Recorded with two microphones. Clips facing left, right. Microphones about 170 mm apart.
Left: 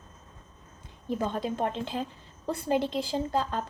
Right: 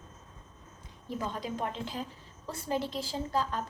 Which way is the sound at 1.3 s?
55° left (ahead or behind).